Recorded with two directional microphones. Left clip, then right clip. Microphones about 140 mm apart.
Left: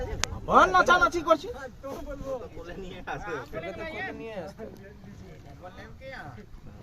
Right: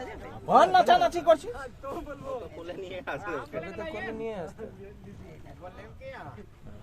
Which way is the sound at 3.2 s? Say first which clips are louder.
Even; 25° right (ahead or behind).